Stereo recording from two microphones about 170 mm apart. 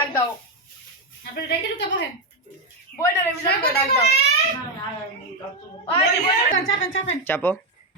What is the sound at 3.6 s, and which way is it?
Speech, 75° left (ahead or behind).